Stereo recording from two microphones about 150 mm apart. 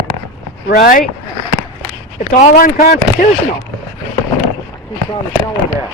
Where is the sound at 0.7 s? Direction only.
75° left (ahead or behind).